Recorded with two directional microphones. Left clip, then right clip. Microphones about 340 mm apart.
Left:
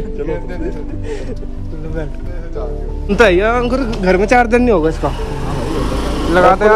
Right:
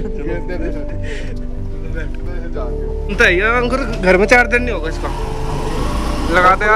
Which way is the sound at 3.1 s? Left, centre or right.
Centre.